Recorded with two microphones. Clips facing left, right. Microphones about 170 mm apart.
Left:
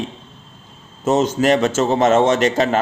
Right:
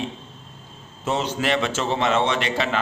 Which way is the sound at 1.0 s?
45° left (ahead or behind).